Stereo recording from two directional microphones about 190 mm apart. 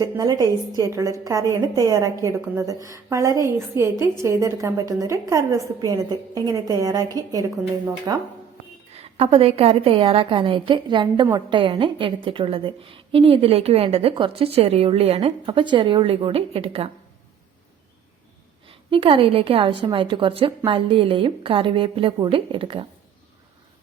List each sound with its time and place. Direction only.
0.0 s a woman's voice: 20° right (ahead or behind)
8.9 s a woman's voice: 30° right (ahead or behind)
18.7 s a woman's voice: 30° right (ahead or behind)